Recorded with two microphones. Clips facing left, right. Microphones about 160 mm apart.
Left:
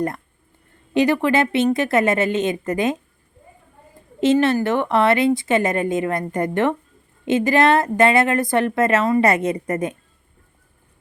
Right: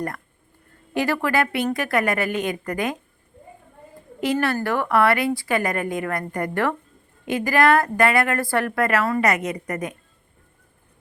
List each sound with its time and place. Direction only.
0.9 s a woman's voice: 20° left (ahead or behind)
4.2 s a woman's voice: 25° left (ahead or behind)